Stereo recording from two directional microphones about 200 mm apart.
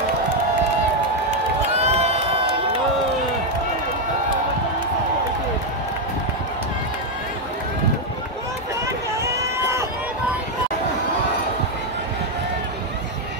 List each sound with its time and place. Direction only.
1.8 s crowd: 30° right (ahead or behind)
9.1 s run: 15° right (ahead or behind)